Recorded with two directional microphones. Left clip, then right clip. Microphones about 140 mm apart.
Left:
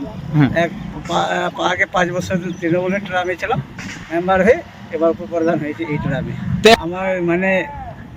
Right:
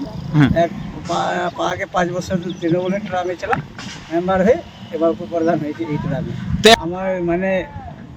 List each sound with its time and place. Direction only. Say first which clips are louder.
0.3 s speech: right 1 dB; 5° left (ahead or behind)